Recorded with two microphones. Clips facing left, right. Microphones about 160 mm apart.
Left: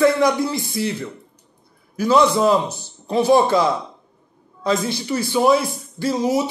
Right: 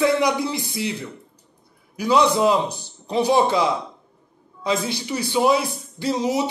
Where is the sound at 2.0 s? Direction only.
15° right (ahead or behind).